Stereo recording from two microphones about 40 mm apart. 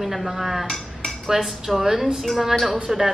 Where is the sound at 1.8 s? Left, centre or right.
Centre.